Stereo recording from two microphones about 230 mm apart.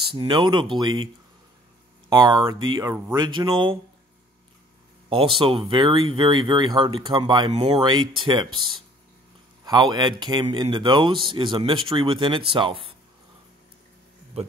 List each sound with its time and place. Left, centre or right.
0.1 s speech: right
2.0 s speech: centre
5.1 s speech: right
9.7 s speech: centre
14.3 s speech: right